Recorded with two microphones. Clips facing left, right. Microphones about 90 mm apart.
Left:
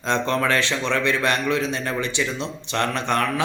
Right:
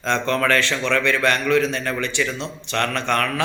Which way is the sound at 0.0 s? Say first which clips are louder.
Right 1 dB; 20° left (ahead or behind).